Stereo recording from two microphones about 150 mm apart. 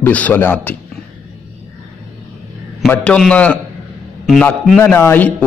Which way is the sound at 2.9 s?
5° left (ahead or behind).